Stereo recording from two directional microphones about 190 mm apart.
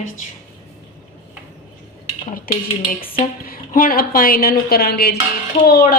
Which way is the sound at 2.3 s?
50° left (ahead or behind).